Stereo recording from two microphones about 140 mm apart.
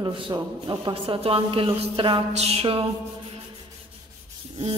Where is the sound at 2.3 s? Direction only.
45° right (ahead or behind).